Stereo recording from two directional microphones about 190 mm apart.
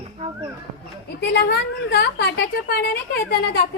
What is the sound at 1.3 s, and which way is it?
A woman's voice, 60° left (ahead or behind).